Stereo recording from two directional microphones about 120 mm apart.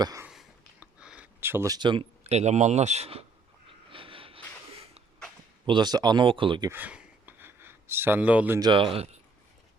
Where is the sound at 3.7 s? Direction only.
45° right (ahead or behind).